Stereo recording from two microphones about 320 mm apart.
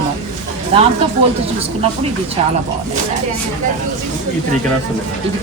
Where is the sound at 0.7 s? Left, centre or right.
Centre.